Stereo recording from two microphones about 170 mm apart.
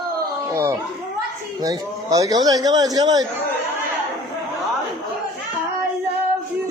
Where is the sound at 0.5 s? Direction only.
15° right (ahead or behind).